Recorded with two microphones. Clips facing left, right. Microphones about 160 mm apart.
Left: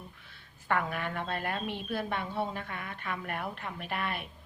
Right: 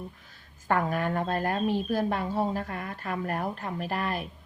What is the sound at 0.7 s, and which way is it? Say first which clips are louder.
A woman's voice: right 5 dB; 40° right (ahead or behind).